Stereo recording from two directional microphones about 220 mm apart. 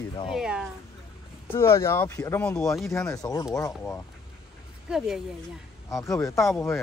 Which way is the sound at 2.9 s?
15° left (ahead or behind).